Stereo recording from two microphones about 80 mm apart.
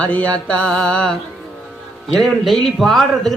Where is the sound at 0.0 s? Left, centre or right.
Centre.